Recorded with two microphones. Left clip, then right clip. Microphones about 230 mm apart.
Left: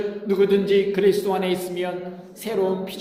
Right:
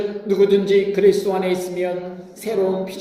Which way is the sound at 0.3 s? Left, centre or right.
Left.